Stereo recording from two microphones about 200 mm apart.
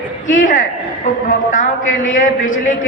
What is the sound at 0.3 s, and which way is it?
A man's voice, 40° left (ahead or behind).